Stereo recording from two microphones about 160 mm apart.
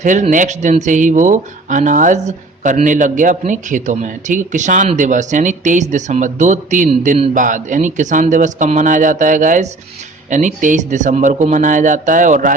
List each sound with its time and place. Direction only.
0.0 s speech: 50° right (ahead or behind)